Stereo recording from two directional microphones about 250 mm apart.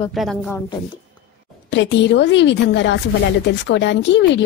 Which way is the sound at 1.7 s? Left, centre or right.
Left.